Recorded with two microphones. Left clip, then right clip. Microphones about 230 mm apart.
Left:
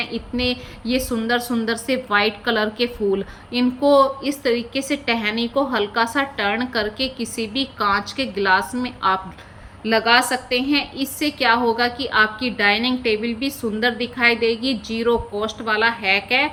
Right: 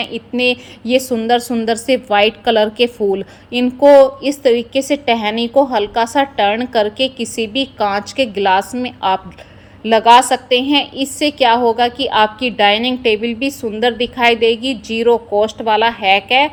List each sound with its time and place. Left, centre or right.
0.0 s a woman's voice: centre